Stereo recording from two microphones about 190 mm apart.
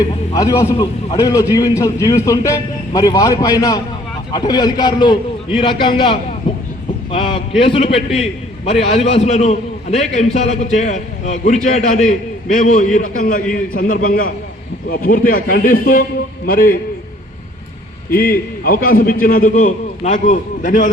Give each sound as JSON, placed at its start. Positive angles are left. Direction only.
{"t": 0.3, "sound": "a man's voice", "side_deg": 15}
{"t": 6.5, "sound": "a sound", "side_deg": 25}
{"t": 7.1, "sound": "a man's voice", "side_deg": 30}
{"t": 18.1, "sound": "a man's voice", "side_deg": 50}